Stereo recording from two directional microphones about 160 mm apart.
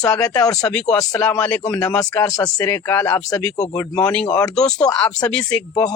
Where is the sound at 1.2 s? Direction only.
10° left (ahead or behind).